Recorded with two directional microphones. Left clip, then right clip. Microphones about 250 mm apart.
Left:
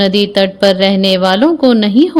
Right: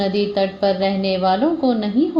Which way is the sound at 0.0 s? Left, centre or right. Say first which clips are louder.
Left 8 dB; left.